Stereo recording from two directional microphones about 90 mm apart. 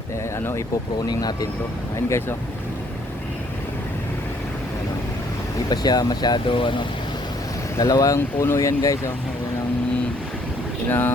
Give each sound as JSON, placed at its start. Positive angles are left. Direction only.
{"t": 1.0, "sound": "speech", "side_deg": 45}
{"t": 5.6, "sound": "speech", "side_deg": 50}
{"t": 7.8, "sound": "speech", "side_deg": 40}
{"t": 10.8, "sound": "speech", "side_deg": 20}